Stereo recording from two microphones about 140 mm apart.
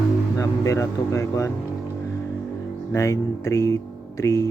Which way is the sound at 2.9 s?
20° left (ahead or behind).